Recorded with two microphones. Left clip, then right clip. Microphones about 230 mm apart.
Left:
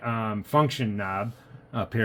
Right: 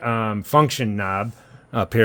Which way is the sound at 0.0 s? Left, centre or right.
Right.